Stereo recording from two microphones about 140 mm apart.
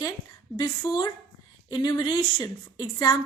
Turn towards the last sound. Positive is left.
turn(degrees=30)  # may be behind; listen again after turning